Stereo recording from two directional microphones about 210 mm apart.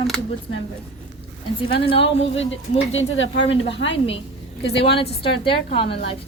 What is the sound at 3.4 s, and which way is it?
Speech, 25° left (ahead or behind).